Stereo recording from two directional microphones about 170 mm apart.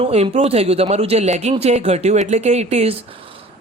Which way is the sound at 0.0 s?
35° right (ahead or behind).